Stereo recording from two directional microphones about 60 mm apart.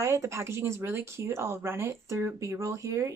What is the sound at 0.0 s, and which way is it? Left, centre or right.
Speech, right.